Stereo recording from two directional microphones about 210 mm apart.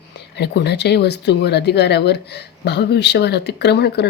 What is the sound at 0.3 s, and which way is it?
Speech, 55° left (ahead or behind).